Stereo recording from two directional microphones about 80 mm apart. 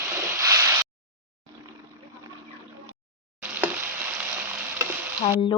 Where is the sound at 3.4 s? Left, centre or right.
Right.